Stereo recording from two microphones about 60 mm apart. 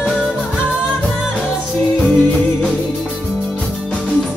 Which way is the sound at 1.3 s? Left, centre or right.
Centre.